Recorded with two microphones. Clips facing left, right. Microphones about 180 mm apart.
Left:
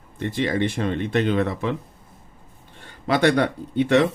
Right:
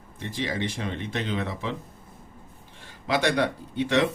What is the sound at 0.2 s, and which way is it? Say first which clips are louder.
Speech: left 7 dB; 60° left (ahead or behind).